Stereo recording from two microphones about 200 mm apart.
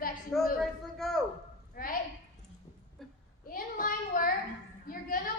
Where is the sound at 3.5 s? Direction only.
45° left (ahead or behind).